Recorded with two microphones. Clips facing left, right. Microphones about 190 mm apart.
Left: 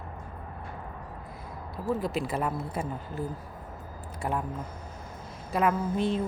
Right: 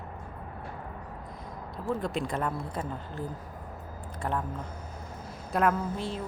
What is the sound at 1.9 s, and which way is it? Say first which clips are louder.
Speech: left 2 dB; 5° left (ahead or behind).